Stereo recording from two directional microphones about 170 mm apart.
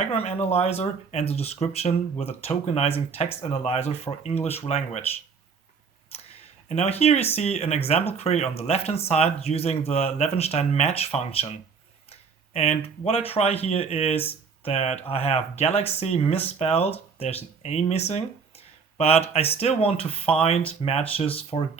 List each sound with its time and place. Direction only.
0.0 s speech: 40° left (ahead or behind)
6.1 s a sound: 35° left (ahead or behind)
6.7 s speech: 40° left (ahead or behind)
12.5 s speech: 35° left (ahead or behind)